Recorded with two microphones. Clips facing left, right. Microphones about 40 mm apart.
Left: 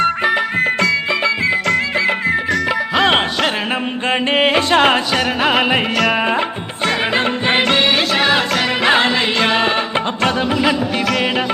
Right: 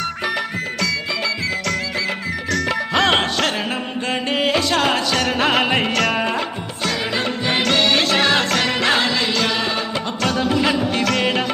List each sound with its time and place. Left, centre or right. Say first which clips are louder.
0.0 s music: left 7 dB; left
2.9 s music: left 2 dB; centre
4.1 s music: left 5 dB; left
5.1 s music: left 2 dB; centre
6.8 s music: left 5 dB; left
7.9 s music: left 2 dB; centre
8.8 s music: left 6 dB; centre
9.0 s music: left 4 dB; left
10.6 s music: left 2 dB; centre